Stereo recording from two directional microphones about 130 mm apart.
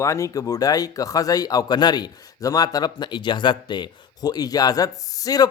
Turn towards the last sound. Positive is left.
turn(degrees=30)  # may be behind; listen again after turning